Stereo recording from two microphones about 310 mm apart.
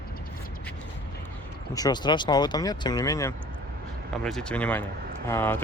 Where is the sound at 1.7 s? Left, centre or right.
Centre.